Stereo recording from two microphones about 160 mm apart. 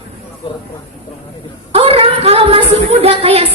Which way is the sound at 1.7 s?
35° right (ahead or behind).